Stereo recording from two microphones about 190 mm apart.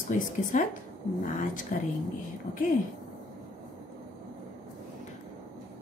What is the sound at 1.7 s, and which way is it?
Speech, 45° left (ahead or behind).